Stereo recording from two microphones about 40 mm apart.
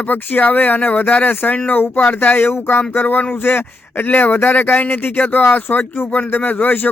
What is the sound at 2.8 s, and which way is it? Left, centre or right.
A man's voice, left.